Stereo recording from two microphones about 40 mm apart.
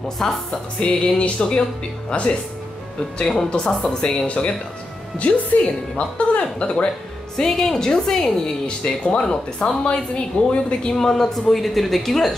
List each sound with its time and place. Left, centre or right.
0.5 s speech: left
5.2 s a woman's voice: left
7.3 s a woman's voice: centre
9.8 s speech: left
11.0 s speech: centre